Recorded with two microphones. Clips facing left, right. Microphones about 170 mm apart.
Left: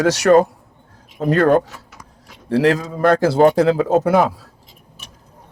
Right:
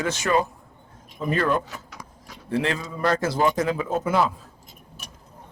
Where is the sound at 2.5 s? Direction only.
80° left.